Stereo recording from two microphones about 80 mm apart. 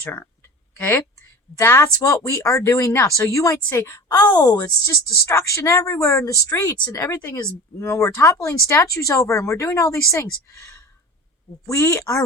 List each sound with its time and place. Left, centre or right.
0.0 s a woman's voice: left
4.1 s speech: left
5.2 s speech: left